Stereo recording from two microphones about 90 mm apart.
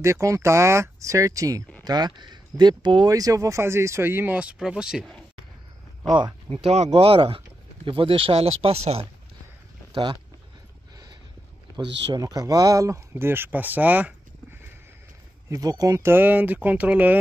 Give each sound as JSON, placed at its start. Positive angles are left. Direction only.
{"t": 0.0, "sound": "speech", "side_deg": -35}
{"t": 1.9, "sound": "speech", "side_deg": -50}
{"t": 3.1, "sound": "speech", "side_deg": -40}
{"t": 6.0, "sound": "speech", "side_deg": -50}
{"t": 6.5, "sound": "speech", "side_deg": -90}
{"t": 11.7, "sound": "speech", "side_deg": -50}
{"t": 13.1, "sound": "speech", "side_deg": -25}
{"t": 15.5, "sound": "speech", "side_deg": -45}
{"t": 16.0, "sound": "speech", "side_deg": -25}